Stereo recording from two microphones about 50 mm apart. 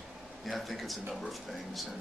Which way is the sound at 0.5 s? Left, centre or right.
Centre.